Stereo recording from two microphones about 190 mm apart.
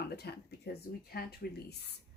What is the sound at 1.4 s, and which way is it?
Speech, 50° left (ahead or behind).